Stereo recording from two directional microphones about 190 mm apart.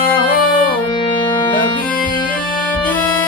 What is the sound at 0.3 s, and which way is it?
Music, 50° left (ahead or behind).